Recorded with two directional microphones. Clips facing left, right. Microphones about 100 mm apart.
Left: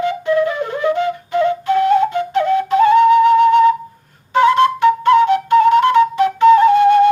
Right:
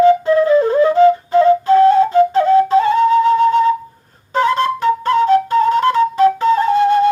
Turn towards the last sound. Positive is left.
turn(degrees=-35)  # may be behind; listen again after turning